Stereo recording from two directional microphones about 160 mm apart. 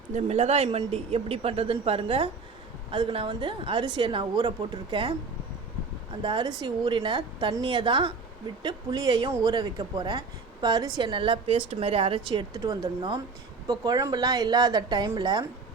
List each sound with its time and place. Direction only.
0.1 s a woman's voice: 40° right (ahead or behind)
6.2 s a woman's voice: 30° right (ahead or behind)